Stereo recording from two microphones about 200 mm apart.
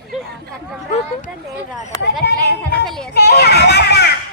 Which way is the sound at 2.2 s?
50° left (ahead or behind).